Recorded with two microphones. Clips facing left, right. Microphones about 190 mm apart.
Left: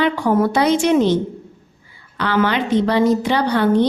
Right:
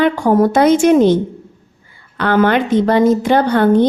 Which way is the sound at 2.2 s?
50° right (ahead or behind).